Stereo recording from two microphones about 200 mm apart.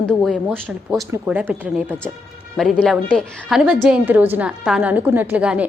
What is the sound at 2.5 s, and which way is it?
A woman's voice, centre (ahead or behind).